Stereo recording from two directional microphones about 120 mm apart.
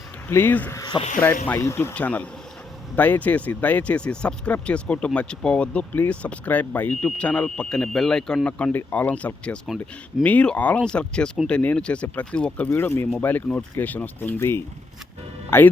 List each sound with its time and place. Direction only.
0.3 s speech: 15° left (ahead or behind)
0.8 s a sound: 35° left (ahead or behind)
1.5 s speech: 20° left (ahead or behind)
9.6 s speech: 5° right (ahead or behind)
10.2 s speech: 10° left (ahead or behind)